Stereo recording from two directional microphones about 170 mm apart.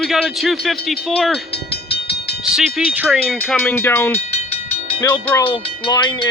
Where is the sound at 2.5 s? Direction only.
5° right (ahead or behind).